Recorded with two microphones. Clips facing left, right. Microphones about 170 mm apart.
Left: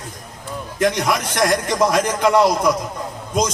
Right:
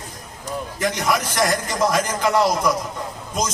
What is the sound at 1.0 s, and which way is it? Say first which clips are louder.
A man's voice: left 1 dB; 55° left (ahead or behind).